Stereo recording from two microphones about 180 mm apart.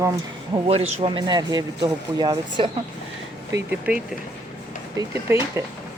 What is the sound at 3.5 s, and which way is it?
Speech, 10° right (ahead or behind).